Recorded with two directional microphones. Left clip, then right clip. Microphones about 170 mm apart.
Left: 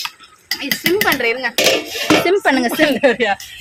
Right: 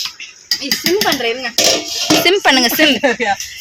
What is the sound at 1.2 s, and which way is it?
Speech, 35° right (ahead or behind).